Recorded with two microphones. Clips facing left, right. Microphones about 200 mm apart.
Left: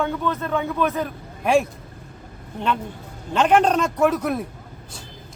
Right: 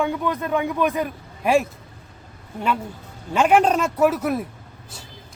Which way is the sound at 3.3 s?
10° right (ahead or behind).